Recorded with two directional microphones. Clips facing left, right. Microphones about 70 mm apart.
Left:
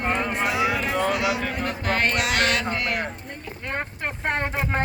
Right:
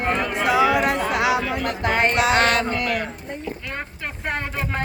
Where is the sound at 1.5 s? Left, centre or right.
Right.